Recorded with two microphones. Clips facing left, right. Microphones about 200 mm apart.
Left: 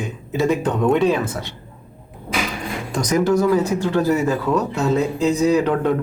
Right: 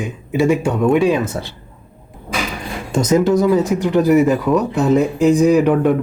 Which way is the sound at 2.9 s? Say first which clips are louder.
Right 4 dB; 25° right (ahead or behind).